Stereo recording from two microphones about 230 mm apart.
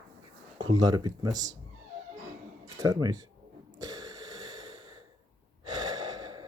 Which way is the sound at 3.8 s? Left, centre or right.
Centre.